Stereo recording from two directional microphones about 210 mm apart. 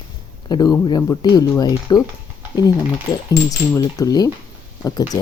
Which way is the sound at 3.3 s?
15° left (ahead or behind).